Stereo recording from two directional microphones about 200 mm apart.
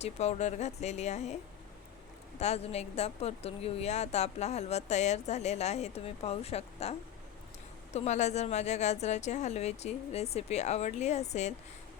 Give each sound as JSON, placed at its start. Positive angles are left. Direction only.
{"t": 0.0, "sound": "a woman's voice", "side_deg": 35}
{"t": 2.4, "sound": "a woman's voice", "side_deg": 35}
{"t": 7.9, "sound": "a woman's voice", "side_deg": 35}